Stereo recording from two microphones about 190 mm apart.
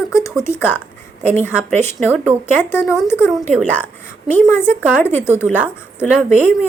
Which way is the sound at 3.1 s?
10° left (ahead or behind).